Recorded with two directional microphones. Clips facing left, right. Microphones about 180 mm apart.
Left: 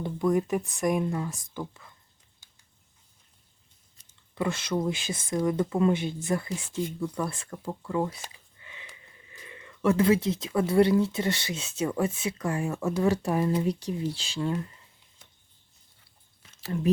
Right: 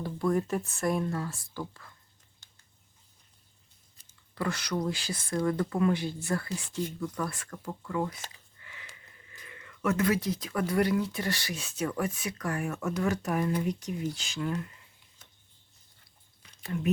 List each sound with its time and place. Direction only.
0.0 s speech: 20° left (ahead or behind)
4.4 s speech: 25° left (ahead or behind)
7.1 s speech: 25° left (ahead or behind)
8.2 s a sound: 20° left (ahead or behind)
9.3 s speech: 20° left (ahead or behind)